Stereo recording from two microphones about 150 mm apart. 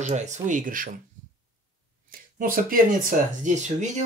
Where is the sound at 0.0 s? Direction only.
50° right (ahead or behind).